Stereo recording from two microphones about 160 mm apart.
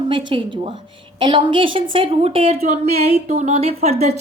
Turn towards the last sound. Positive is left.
turn(degrees=-40)  # may be behind; listen again after turning